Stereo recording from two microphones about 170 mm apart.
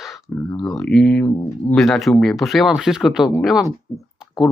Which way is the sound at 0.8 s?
5° left (ahead or behind).